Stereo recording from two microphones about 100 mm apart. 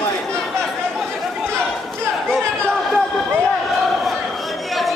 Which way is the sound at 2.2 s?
5° left (ahead or behind).